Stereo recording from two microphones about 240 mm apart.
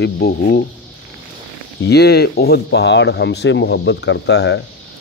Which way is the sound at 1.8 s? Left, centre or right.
Left.